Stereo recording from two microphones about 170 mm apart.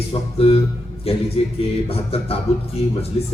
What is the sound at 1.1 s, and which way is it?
A man's voice, 35° left (ahead or behind).